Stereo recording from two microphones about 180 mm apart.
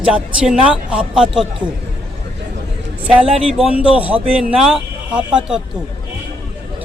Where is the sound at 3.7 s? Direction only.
5° right (ahead or behind).